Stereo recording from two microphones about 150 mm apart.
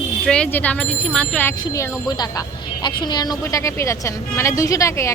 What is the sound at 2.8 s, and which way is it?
A woman's voice, 30° left (ahead or behind).